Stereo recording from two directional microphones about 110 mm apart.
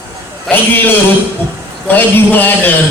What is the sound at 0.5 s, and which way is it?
A man's voice, 20° left (ahead or behind).